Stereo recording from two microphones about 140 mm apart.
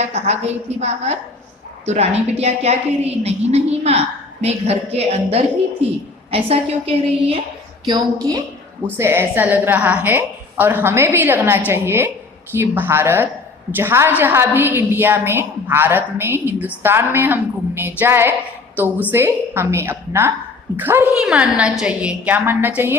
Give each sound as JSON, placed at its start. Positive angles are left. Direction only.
{"t": 0.0, "sound": "a woman's voice", "side_deg": -50}
{"t": 7.9, "sound": "a woman's voice", "side_deg": -30}
{"t": 9.0, "sound": "a woman's voice", "side_deg": -15}
{"t": 21.1, "sound": "a woman's voice", "side_deg": -5}